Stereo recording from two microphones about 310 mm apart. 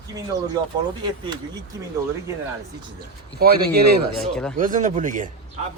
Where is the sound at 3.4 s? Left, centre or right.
Right.